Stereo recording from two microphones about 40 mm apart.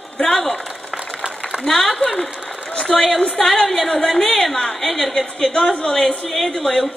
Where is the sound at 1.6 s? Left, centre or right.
Centre.